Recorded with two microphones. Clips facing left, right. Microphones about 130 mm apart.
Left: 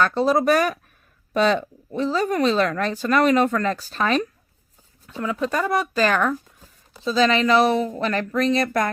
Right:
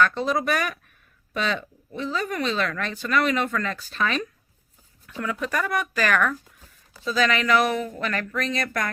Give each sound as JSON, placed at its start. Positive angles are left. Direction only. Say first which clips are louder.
{"t": 0.0, "sound": "speech", "louder": "left 4 dB", "side_deg": 35}
{"t": 5.0, "sound": "speech", "louder": "left 4 dB", "side_deg": 25}